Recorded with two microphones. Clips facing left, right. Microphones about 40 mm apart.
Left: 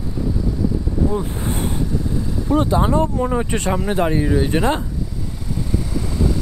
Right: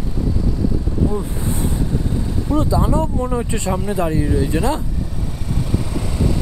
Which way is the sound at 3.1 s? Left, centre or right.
Left.